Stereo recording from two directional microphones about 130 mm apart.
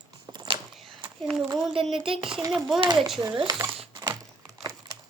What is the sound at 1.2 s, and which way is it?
Speech, 5° left (ahead or behind).